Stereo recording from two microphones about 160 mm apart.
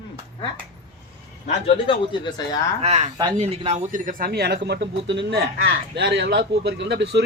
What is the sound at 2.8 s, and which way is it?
Speech, 45° right (ahead or behind).